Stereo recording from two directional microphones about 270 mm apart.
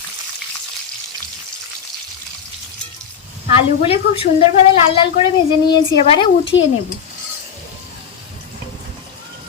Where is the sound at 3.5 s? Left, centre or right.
Left.